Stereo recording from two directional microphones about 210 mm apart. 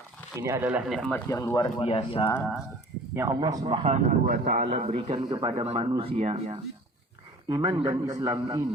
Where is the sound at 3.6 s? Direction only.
30° right (ahead or behind).